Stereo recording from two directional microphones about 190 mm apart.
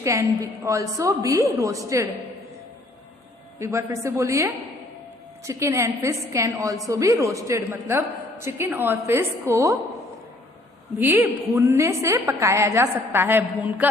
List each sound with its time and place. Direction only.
0.0 s a woman's voice: 15° right (ahead or behind)
3.6 s a woman's voice: 15° right (ahead or behind)
10.9 s a woman's voice: 10° right (ahead or behind)